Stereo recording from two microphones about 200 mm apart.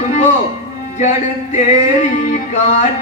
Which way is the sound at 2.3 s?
35° left (ahead or behind).